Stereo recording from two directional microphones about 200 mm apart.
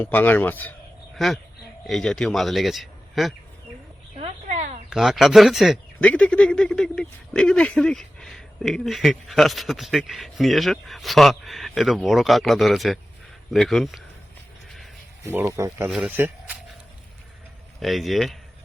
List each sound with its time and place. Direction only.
0.0 s a man's voice: 10° left (ahead or behind)
4.2 s a sound: 35° right (ahead or behind)
4.9 s speech: centre (ahead or behind)
15.2 s speech: 15° right (ahead or behind)
15.9 s speech: 5° right (ahead or behind)
17.7 s speech: centre (ahead or behind)